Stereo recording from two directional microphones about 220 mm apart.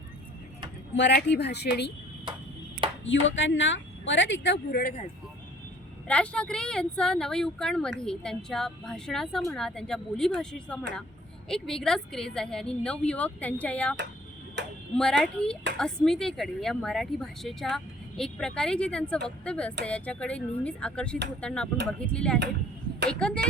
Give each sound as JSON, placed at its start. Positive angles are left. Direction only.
{"t": 0.9, "sound": "speech", "side_deg": 50}
{"t": 3.0, "sound": "speech", "side_deg": 55}
{"t": 4.8, "sound": "speech", "side_deg": 35}
{"t": 6.1, "sound": "speech", "side_deg": 5}
{"t": 14.9, "sound": "speech", "side_deg": 5}